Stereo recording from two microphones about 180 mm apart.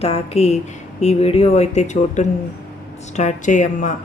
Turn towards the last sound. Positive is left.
turn(degrees=45)  # may be behind; listen again after turning